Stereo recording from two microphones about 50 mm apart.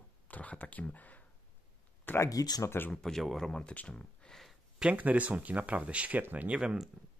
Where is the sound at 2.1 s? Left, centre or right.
Left.